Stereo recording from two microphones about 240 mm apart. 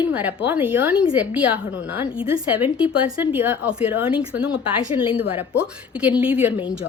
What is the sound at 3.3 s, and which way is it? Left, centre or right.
Speech, centre.